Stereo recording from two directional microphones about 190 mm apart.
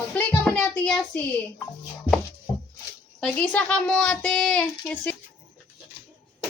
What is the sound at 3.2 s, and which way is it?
Speech, 5° left (ahead or behind).